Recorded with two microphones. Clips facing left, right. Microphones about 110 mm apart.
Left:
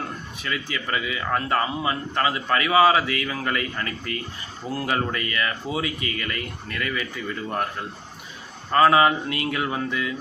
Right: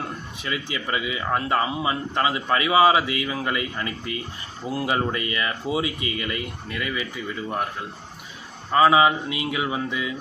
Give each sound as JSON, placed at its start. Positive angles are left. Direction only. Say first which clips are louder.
{"t": 0.4, "sound": "speech", "louder": "even", "side_deg": -20}